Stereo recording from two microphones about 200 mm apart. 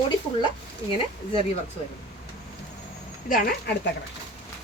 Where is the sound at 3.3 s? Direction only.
45° left (ahead or behind).